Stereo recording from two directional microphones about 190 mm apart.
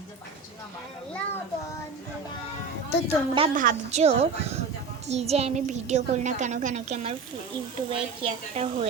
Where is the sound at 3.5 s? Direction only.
45° right (ahead or behind).